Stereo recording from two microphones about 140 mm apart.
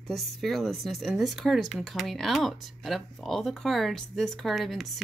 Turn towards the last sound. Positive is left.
turn(degrees=0)  # may be behind; listen again after turning